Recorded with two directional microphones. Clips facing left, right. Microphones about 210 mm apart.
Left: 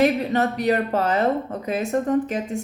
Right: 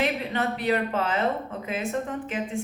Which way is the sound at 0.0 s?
40° left (ahead or behind).